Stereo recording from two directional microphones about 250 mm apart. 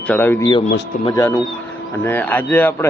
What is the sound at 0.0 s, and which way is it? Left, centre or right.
Speech, centre.